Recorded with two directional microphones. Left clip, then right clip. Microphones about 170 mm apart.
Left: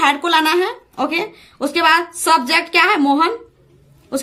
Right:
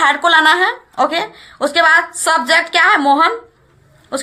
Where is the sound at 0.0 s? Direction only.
15° left (ahead or behind).